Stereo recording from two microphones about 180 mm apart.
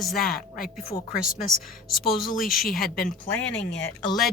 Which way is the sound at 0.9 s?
55° left (ahead or behind).